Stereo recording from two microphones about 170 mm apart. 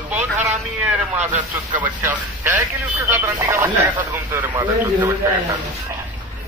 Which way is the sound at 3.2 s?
15° right (ahead or behind).